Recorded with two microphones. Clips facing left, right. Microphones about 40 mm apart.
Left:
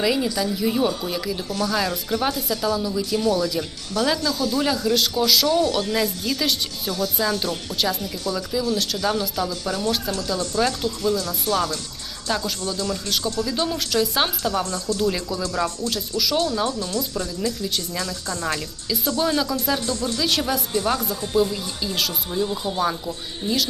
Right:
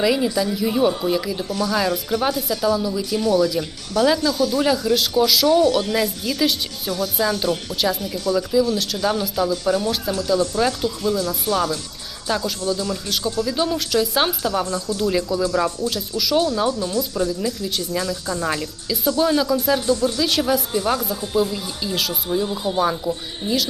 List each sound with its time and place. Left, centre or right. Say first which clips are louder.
0.0 s speech: right 3 dB; centre
5.5 s speech: right 4 dB; right
5.9 s speech: right 1 dB; centre